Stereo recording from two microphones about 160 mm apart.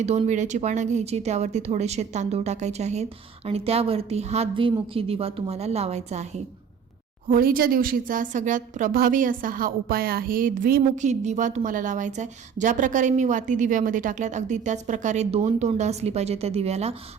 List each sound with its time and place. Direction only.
0.0 s a woman's voice: 45° right (ahead or behind)
7.3 s a woman's voice: 65° right (ahead or behind)
11.0 s a woman's voice: 45° right (ahead or behind)